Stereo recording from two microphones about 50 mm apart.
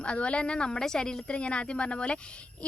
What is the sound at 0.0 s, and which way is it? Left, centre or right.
A woman's voice, left.